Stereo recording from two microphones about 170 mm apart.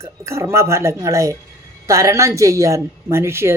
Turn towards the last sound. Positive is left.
turn(degrees=-15)  # may be behind; listen again after turning